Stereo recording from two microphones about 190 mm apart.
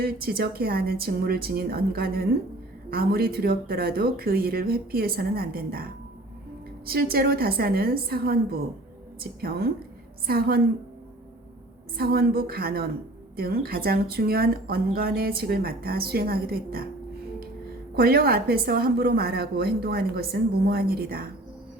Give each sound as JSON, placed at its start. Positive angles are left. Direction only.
{"t": 0.0, "sound": "speech", "side_deg": -50}
{"t": 11.9, "sound": "speech", "side_deg": -55}
{"t": 17.9, "sound": "a woman's voice", "side_deg": -50}